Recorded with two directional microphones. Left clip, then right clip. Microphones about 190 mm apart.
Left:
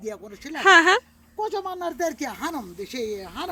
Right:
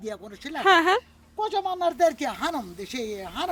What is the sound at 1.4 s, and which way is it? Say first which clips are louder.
Speech: right 2 dB; 20° right (ahead or behind).